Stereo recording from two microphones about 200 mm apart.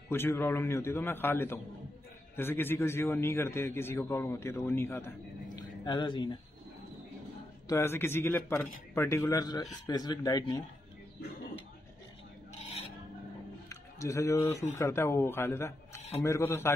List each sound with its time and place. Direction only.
0.1 s a man's voice: 10° left (ahead or behind)
5.6 s speech: 20° left (ahead or behind)
7.6 s a man's voice: 15° left (ahead or behind)
13.7 s a man's voice: 15° left (ahead or behind)